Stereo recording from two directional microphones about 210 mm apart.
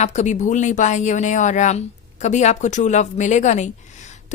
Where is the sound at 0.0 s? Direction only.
35° left (ahead or behind).